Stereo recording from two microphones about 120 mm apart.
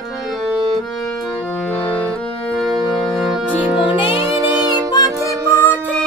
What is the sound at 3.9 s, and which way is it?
Music, 50° left (ahead or behind).